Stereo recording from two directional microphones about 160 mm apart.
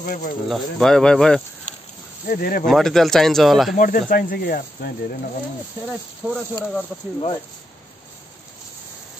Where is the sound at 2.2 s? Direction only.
65° left (ahead or behind).